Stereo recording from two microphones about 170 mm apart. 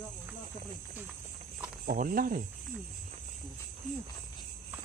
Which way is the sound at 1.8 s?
55° right (ahead or behind).